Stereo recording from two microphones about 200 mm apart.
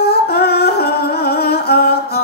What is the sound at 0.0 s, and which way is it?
Music, 50° left (ahead or behind).